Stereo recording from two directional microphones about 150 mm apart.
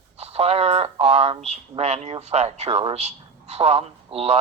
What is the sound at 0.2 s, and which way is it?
Speech, 45° right (ahead or behind).